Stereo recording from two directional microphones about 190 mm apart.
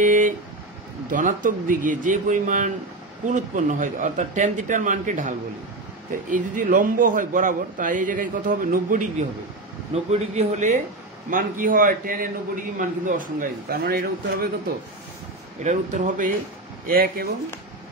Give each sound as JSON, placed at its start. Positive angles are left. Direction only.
{"t": 0.0, "sound": "a sound", "side_deg": -45}
{"t": 1.1, "sound": "speech", "side_deg": -45}
{"t": 6.3, "sound": "a man's voice", "side_deg": -45}
{"t": 9.9, "sound": "a man's voice", "side_deg": -35}
{"t": 15.6, "sound": "a man's voice", "side_deg": -40}